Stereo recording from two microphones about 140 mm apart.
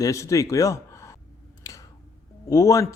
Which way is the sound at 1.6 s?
25° left (ahead or behind).